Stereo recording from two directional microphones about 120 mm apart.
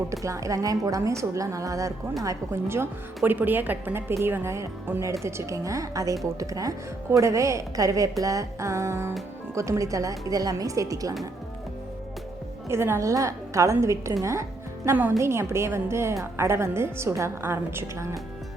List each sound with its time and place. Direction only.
0.1 s a woman's voice: 25° right (ahead or behind)
12.6 s a woman's voice: 20° right (ahead or behind)
14.8 s a woman's voice: 15° right (ahead or behind)